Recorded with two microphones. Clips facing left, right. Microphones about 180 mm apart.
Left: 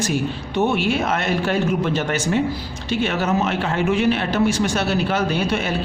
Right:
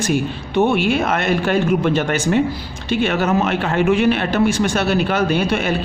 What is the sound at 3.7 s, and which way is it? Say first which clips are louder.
A man's voice: right 4 dB; 60° right (ahead or behind).